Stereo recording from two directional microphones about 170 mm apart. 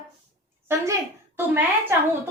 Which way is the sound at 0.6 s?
15° right (ahead or behind).